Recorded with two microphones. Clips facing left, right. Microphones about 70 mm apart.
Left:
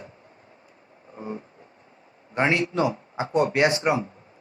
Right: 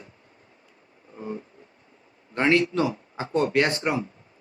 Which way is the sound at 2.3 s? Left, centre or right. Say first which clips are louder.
Right 1 dB; left.